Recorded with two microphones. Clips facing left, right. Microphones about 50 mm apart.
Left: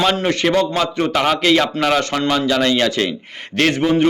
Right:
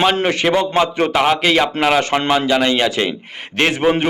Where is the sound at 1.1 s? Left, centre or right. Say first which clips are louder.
Right 1 dB; centre.